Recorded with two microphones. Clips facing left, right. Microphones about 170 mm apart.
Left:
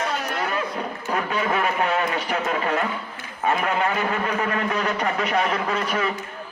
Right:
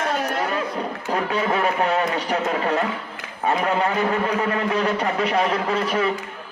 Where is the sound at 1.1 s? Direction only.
30° right (ahead or behind).